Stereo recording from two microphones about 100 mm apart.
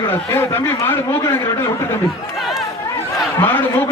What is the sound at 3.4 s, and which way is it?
Speech, 20° left (ahead or behind).